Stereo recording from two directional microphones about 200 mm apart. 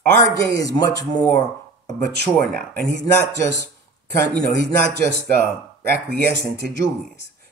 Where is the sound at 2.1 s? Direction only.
50° right (ahead or behind).